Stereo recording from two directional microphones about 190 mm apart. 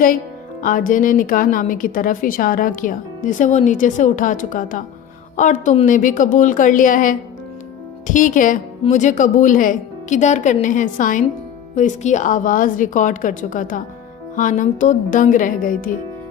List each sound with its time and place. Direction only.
0.6 s a woman's voice: 45° left (ahead or behind)